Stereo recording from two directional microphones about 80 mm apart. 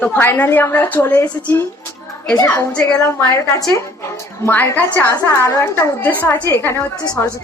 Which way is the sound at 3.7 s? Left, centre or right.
Left.